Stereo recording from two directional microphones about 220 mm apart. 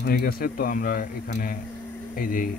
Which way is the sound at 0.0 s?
45° left (ahead or behind).